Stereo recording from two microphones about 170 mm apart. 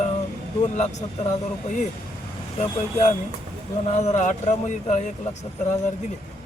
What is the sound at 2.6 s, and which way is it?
Speech, 45° left (ahead or behind).